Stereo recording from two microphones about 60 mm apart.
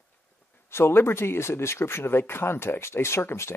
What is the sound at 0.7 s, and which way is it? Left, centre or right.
Speech, left.